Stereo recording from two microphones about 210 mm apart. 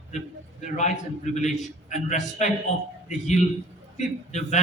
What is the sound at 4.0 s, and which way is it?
Speech, 35° left (ahead or behind).